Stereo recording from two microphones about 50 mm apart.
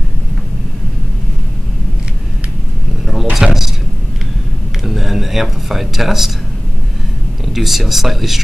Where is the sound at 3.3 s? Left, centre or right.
Centre.